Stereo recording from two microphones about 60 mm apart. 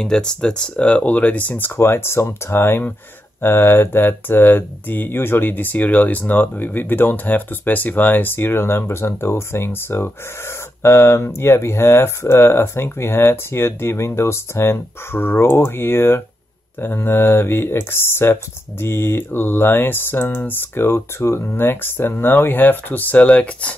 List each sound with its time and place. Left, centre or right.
0.0 s speech: centre